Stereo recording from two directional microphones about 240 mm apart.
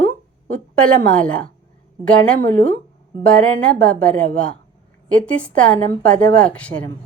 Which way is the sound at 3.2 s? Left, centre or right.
Centre.